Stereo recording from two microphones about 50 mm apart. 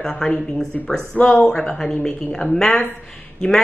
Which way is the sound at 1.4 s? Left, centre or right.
Centre.